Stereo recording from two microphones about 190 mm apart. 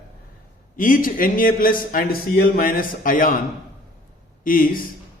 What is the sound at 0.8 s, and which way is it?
A man's voice, 45° left (ahead or behind).